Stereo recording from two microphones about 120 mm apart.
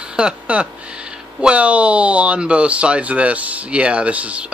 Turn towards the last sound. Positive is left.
turn(degrees=-10)  # may be behind; listen again after turning